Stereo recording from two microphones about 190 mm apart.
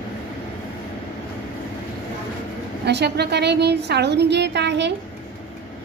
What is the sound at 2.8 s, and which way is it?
A woman's voice, 60° right (ahead or behind).